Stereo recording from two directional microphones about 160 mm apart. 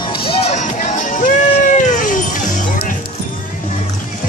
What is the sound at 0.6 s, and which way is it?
Cat, 50° left (ahead or behind).